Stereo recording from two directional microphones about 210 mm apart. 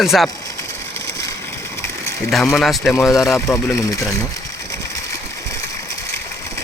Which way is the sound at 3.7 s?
15° left (ahead or behind).